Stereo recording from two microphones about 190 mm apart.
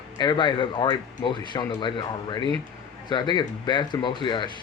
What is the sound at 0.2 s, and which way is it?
Speech, 25° left (ahead or behind).